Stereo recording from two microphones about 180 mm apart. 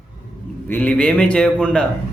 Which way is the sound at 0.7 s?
10° left (ahead or behind).